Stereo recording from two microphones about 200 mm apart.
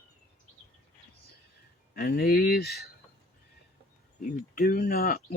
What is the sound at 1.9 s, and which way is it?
Speech, 50° left (ahead or behind).